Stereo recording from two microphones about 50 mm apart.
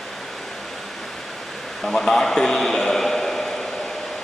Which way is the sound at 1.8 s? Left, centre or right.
Centre.